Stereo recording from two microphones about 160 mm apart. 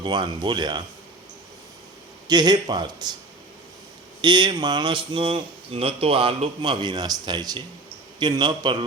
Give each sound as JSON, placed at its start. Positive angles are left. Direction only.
{"t": 0.0, "sound": "a man's voice", "side_deg": -30}
{"t": 2.2, "sound": "a man's voice", "side_deg": -25}
{"t": 4.2, "sound": "a man's voice", "side_deg": -30}